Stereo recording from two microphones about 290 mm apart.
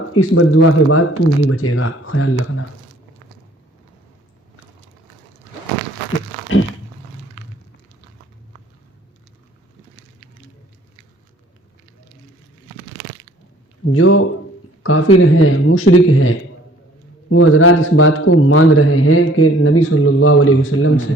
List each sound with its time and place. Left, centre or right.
0.1 s a man's voice: left
13.8 s a man's voice: left